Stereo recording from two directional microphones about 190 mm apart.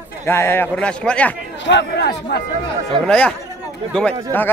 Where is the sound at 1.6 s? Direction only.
65° left (ahead or behind).